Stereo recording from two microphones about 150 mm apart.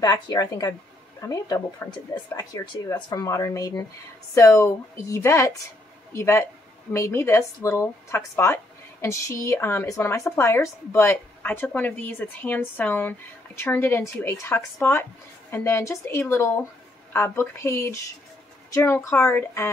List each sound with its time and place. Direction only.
0.0 s speech: 25° left (ahead or behind)